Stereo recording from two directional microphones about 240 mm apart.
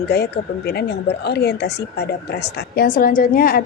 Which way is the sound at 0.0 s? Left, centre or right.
Left.